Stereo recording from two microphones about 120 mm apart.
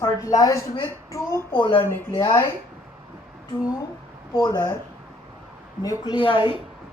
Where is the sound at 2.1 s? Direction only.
35° left (ahead or behind).